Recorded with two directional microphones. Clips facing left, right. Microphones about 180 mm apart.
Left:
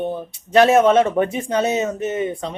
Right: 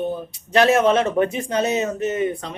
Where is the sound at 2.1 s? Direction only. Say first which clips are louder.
Even; 25° left (ahead or behind).